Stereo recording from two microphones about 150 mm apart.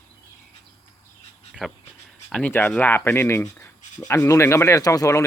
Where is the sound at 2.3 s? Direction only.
10° left (ahead or behind).